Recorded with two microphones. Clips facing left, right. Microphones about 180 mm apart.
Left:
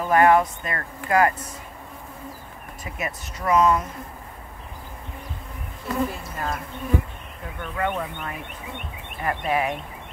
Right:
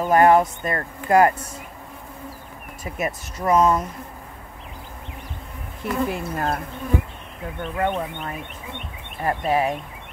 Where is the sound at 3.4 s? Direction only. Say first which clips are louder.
Right 1 dB; 40° right (ahead or behind).